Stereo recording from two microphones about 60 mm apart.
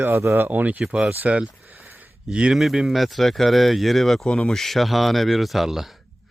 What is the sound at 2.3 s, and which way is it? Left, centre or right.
Speech, centre.